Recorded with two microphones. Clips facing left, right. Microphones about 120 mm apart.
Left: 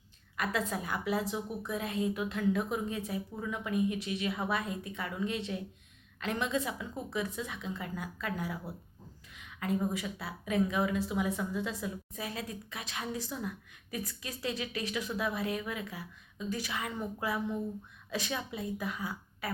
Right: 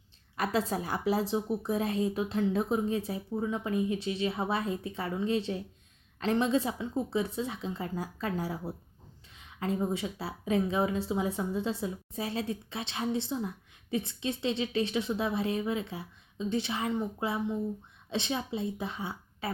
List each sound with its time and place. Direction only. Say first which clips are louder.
0.3 s a woman's voice: right 4 dB; 35° right (ahead or behind)